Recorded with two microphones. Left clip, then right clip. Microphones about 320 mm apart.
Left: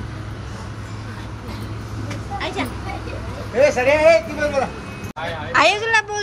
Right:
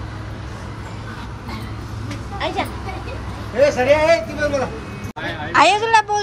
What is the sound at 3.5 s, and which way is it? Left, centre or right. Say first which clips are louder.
Speech: right 1 dB; left.